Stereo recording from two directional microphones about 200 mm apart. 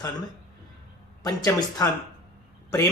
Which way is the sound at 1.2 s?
20° left (ahead or behind).